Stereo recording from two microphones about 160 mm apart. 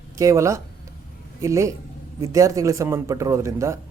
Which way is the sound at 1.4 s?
20° right (ahead or behind).